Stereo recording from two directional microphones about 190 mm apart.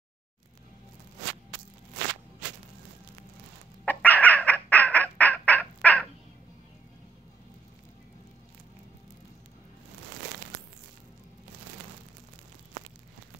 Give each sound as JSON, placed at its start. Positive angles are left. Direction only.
{"t": 3.8, "sound": "squawk", "side_deg": 10}